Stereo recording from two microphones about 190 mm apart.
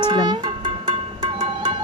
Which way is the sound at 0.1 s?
20° right (ahead or behind).